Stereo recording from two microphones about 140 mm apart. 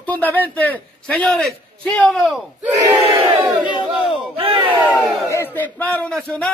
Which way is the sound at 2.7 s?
25° right (ahead or behind).